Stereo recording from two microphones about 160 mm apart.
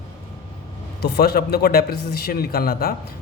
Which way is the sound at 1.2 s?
75° left (ahead or behind).